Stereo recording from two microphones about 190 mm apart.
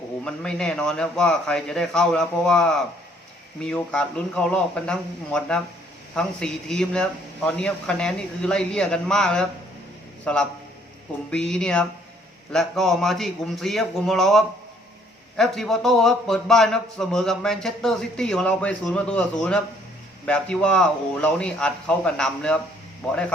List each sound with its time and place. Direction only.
0.3 s a man's voice: 5° left (ahead or behind)